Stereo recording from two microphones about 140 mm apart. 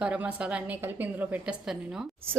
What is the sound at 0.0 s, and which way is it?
A woman's voice, 10° right (ahead or behind).